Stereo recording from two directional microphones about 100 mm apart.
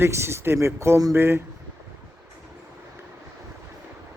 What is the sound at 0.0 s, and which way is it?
Speech, 25° right (ahead or behind).